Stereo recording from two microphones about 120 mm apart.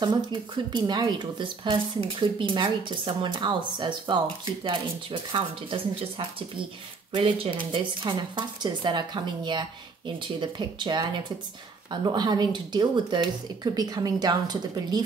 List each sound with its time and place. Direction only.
0.0 s speech: 40° right (ahead or behind)